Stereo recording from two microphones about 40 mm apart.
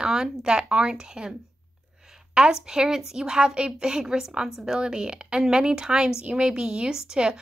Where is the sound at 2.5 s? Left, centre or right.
Centre.